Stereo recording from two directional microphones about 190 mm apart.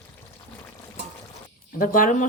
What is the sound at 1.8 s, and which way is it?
Speech, 45° left (ahead or behind).